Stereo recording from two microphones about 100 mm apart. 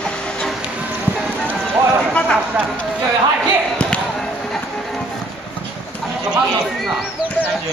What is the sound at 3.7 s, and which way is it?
Basketball bounce, 10° left (ahead or behind).